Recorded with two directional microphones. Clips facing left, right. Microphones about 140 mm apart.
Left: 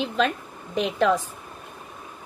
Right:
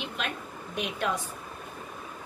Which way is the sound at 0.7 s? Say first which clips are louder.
Left 9 dB; 90° left.